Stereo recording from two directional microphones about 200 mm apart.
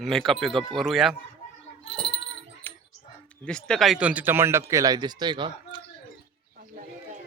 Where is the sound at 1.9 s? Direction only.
30° left (ahead or behind).